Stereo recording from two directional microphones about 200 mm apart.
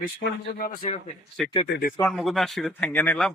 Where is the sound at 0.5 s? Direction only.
45° left (ahead or behind).